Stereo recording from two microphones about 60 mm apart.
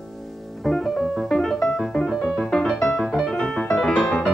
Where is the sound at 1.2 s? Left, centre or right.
Centre.